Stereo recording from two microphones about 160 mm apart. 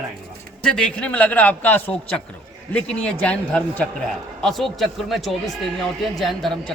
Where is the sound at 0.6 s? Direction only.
5° left (ahead or behind).